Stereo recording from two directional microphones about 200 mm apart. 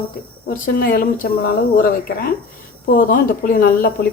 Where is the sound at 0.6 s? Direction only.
45° left (ahead or behind).